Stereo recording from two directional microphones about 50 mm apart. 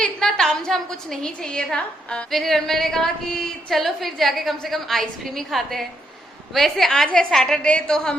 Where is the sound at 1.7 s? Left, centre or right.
Left.